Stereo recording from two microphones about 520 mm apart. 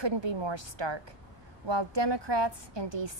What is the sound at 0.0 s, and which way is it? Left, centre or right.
A woman's voice, right.